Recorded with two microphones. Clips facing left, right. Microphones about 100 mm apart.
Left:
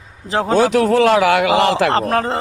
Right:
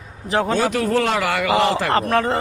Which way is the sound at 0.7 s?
70° left (ahead or behind).